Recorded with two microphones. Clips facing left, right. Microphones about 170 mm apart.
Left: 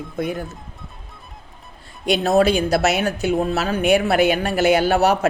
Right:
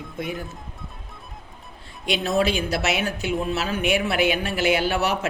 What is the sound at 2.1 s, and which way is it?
Speech, 40° left (ahead or behind).